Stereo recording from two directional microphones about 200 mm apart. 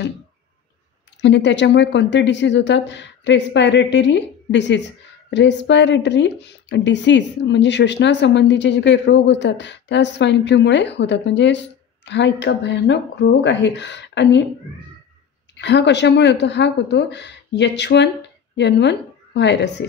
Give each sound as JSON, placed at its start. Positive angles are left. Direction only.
{"t": 1.2, "sound": "a woman's voice", "side_deg": 60}
{"t": 15.5, "sound": "a woman's voice", "side_deg": 60}